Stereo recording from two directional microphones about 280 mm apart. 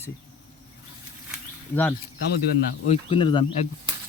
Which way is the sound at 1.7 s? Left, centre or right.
Centre.